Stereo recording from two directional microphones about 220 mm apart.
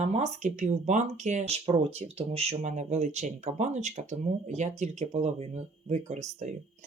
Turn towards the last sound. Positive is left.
turn(degrees=-30)  # may be behind; listen again after turning